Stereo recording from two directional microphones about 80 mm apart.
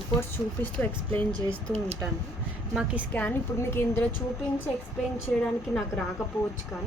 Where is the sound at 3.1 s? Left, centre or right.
Centre.